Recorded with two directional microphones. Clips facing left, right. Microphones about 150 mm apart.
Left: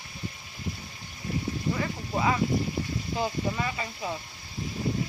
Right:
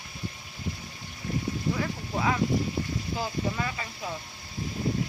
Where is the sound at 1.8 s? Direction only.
5° left (ahead or behind).